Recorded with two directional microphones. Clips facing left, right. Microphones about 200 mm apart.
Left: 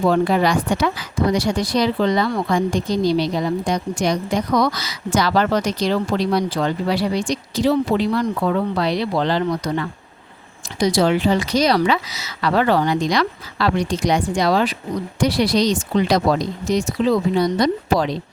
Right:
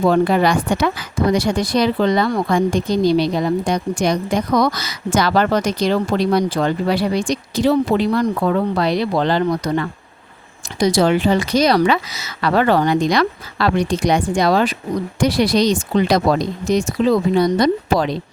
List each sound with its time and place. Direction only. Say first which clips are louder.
0.1 s speech: right 2 dB; 55° right (ahead or behind)